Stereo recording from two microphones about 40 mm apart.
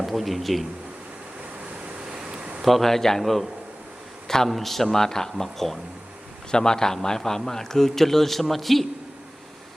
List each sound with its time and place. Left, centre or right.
0.0 s speech: centre
2.1 s a sound: right
2.6 s speech: centre
4.4 s speech: centre
6.5 s speech: centre